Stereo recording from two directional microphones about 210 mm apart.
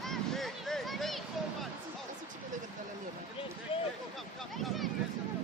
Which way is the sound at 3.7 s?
25° left (ahead or behind).